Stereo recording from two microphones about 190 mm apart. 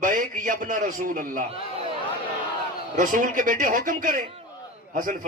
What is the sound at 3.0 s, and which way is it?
A man's voice, 45° right (ahead or behind).